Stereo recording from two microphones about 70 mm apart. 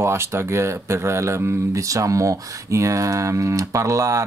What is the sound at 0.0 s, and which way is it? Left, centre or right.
Speech, right.